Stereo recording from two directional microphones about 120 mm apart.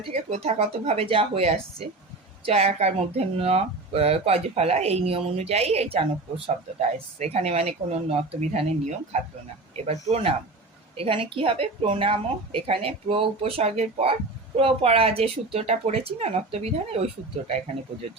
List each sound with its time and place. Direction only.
0.1 s speech: 65° right (ahead or behind)
9.7 s speech: 65° right (ahead or behind)
10.9 s a woman's voice: 50° right (ahead or behind)
13.6 s speech: 60° right (ahead or behind)